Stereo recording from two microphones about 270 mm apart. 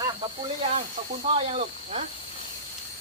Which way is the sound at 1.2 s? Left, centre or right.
Right.